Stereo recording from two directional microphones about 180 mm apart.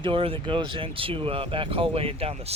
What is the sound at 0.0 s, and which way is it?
Speech, 30° right (ahead or behind).